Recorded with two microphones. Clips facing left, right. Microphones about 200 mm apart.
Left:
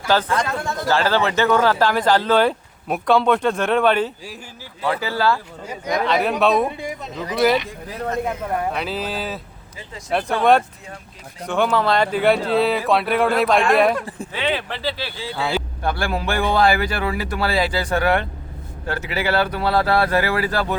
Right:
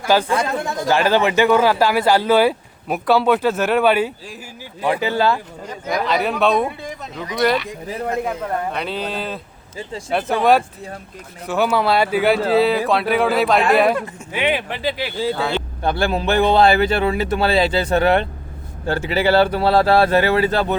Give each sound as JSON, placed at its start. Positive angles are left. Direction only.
{"t": 0.1, "sound": "a man's voice", "side_deg": -10}
{"t": 5.9, "sound": "speech", "side_deg": 0}
{"t": 8.7, "sound": "speech", "side_deg": 0}
{"t": 11.4, "sound": "speech", "side_deg": -5}
{"t": 14.3, "sound": "speech", "side_deg": -15}
{"t": 15.4, "sound": "speech", "side_deg": 5}
{"t": 15.8, "sound": "a man's voice", "side_deg": -25}